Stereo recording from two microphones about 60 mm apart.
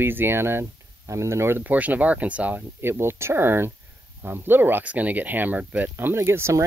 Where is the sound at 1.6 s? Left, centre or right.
Right.